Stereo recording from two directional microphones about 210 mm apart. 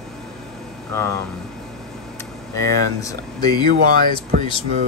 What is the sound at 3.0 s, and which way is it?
Speech, 15° left (ahead or behind).